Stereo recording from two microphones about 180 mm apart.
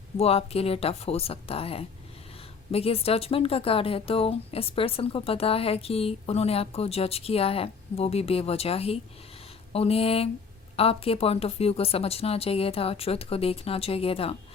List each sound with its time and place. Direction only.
0.2 s speech: 35° left (ahead or behind)